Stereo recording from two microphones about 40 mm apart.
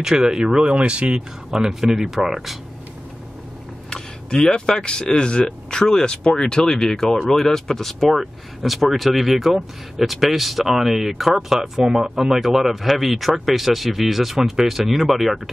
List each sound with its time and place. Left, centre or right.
0.0 s speech: centre
0.8 s speech: right
1.1 s speech: centre
3.9 s speech: centre